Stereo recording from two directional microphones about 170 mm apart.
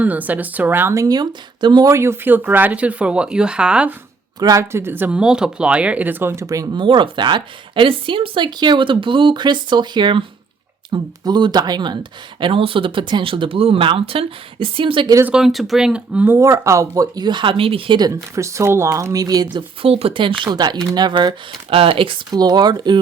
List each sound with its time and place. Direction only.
0.0 s speech: 10° right (ahead or behind)
4.4 s speech: 20° right (ahead or behind)
15.1 s speech: 10° right (ahead or behind)
19.5 s speech: 35° right (ahead or behind)